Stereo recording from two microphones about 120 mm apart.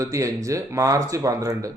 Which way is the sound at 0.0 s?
25° right (ahead or behind).